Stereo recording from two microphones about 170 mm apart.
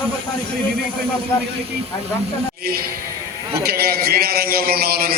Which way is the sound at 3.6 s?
65° right (ahead or behind).